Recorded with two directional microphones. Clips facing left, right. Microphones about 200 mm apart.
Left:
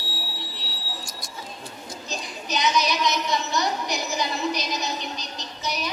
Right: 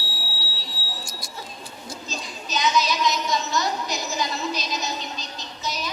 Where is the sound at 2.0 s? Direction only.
15° left (ahead or behind).